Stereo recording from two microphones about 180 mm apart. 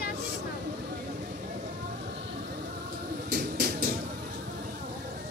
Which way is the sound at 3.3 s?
60° right (ahead or behind).